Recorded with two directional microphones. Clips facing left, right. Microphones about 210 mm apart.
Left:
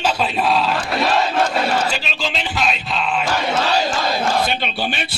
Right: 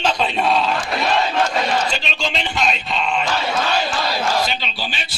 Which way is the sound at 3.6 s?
40° left (ahead or behind).